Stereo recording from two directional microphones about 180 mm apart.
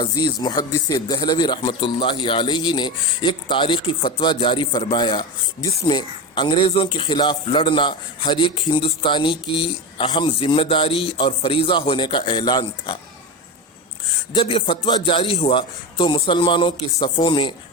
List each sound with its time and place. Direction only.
0.0 s a man's voice: 25° left (ahead or behind)
14.3 s a man's voice: 30° left (ahead or behind)